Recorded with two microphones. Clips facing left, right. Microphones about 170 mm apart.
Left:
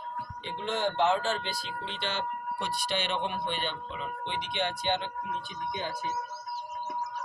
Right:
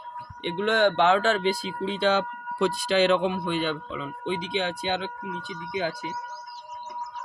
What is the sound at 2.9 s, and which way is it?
Speech, 90° right.